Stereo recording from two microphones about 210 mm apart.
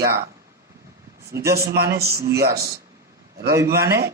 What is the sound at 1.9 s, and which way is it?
Speech, 50° right (ahead or behind).